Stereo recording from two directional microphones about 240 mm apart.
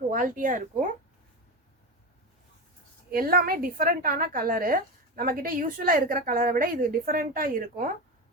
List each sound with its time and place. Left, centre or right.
0.1 s a woman's voice: right
3.1 s a woman's voice: right